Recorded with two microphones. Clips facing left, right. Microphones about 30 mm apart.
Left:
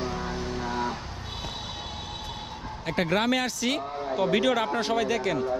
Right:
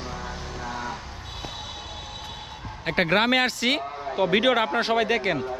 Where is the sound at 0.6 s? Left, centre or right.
Left.